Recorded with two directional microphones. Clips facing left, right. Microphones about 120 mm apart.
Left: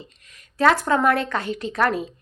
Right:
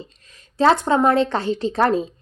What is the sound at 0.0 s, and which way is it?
A woman's voice, 30° right (ahead or behind).